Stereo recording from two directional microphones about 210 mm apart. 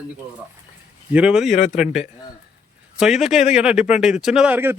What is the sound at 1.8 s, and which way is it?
Speech, centre (ahead or behind).